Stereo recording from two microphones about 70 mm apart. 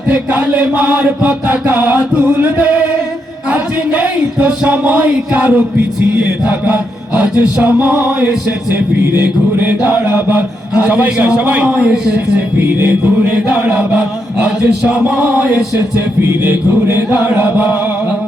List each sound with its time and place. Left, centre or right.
0.1 s chant: right
12.5 s chant: right
16.4 s chant: right
17.2 s chant: right